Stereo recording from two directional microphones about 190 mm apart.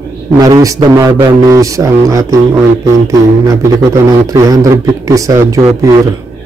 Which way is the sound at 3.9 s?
20° right (ahead or behind).